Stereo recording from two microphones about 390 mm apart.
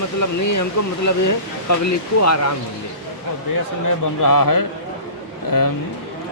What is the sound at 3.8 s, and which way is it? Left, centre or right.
A man's voice, left.